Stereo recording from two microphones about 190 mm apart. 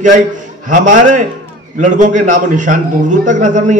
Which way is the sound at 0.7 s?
40° right (ahead or behind).